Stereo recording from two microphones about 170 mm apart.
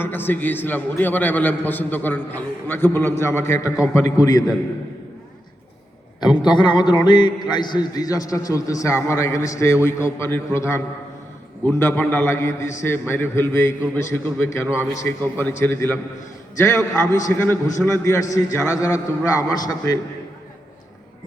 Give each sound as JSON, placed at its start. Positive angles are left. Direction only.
{"t": 0.0, "sound": "a man's voice", "side_deg": 10}
{"t": 6.1, "sound": "a man's voice", "side_deg": 25}
{"t": 17.2, "sound": "a man's voice", "side_deg": 15}